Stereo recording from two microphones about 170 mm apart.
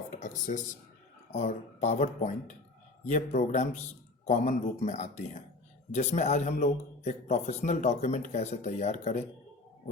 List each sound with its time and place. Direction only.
0.1 s a man's voice: 45° left (ahead or behind)